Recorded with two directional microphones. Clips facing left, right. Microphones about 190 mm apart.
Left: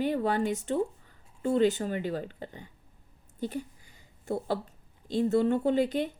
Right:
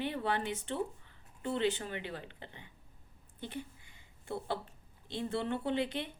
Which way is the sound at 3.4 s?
40° left (ahead or behind).